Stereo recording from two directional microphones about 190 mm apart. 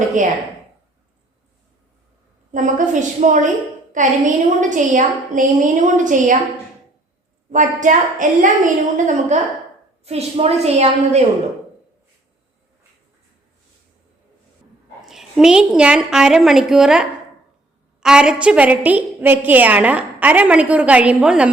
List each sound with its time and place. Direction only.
2.5 s a woman's voice: 40° right (ahead or behind)
7.5 s a woman's voice: 40° right (ahead or behind)
15.0 s a woman's voice: centre (ahead or behind)